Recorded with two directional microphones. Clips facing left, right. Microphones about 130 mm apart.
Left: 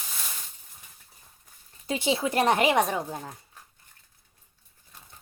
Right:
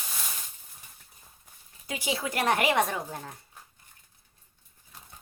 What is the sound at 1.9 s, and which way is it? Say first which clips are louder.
Speech: left 5 dB; 25° left (ahead or behind).